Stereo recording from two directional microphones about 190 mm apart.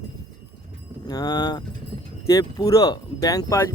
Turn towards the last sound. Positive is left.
turn(degrees=15)  # may be behind; listen again after turning